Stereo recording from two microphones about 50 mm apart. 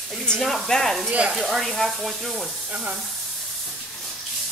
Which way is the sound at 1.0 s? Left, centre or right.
Right.